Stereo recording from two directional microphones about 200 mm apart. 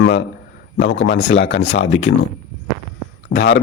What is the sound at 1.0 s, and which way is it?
Speech, 35° left (ahead or behind).